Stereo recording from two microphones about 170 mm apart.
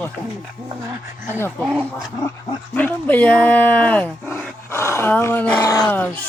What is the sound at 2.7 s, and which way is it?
Speech, 10° left (ahead or behind).